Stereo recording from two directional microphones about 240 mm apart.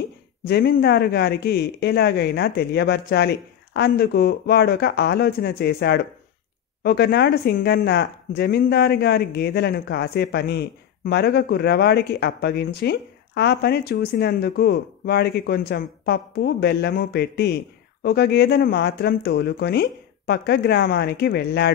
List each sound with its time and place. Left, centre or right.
0.5 s speech: left